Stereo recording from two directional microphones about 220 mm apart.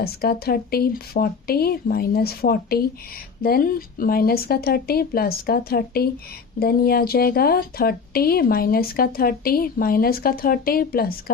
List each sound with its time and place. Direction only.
0.0 s speech: 45° left (ahead or behind)